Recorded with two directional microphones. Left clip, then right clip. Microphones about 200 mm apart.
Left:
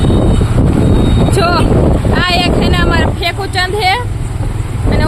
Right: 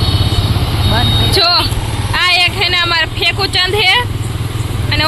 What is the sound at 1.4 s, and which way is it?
Boat, 10° left (ahead or behind).